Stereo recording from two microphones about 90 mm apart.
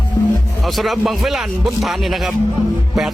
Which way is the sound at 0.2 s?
45° left (ahead or behind).